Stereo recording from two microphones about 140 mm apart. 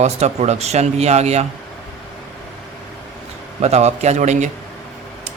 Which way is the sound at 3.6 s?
50° right (ahead or behind).